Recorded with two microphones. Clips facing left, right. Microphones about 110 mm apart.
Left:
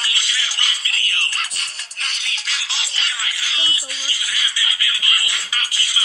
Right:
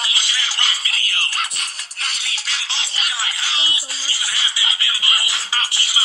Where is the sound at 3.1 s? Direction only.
25° right (ahead or behind).